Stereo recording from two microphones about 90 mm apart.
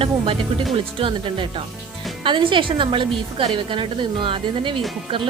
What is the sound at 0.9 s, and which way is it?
A woman's voice, 75° right (ahead or behind).